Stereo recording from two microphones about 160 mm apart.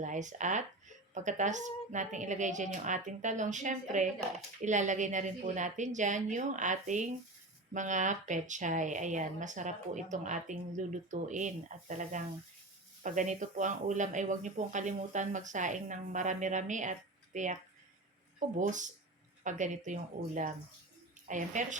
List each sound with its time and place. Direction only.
0.0 s speech: 50° right (ahead or behind)